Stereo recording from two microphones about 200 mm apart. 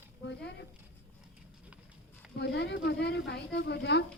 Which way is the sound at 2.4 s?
60° left (ahead or behind).